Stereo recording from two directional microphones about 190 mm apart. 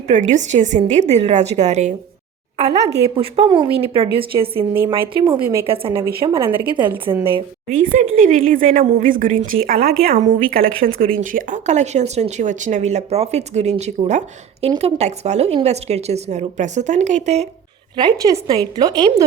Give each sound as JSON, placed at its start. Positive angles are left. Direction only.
{"t": 0.1, "sound": "speech", "side_deg": -40}
{"t": 3.2, "sound": "a woman's voice", "side_deg": -30}
{"t": 5.6, "sound": "a woman's voice", "side_deg": -30}
{"t": 6.9, "sound": "a woman's voice", "side_deg": -10}
{"t": 7.9, "sound": "a woman's voice", "side_deg": -45}
{"t": 10.0, "sound": "speech", "side_deg": -35}
{"t": 10.5, "sound": "speech", "side_deg": -50}
{"t": 17.9, "sound": "a woman's voice", "side_deg": -20}